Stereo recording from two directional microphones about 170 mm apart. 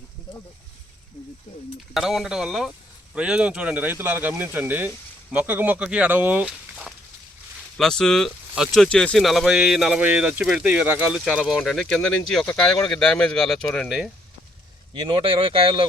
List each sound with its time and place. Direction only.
1.9 s speech: centre (ahead or behind)
14.9 s speech: 30° right (ahead or behind)